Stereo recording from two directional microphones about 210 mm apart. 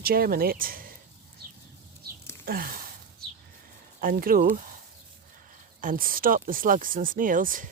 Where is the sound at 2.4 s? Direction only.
45° right (ahead or behind).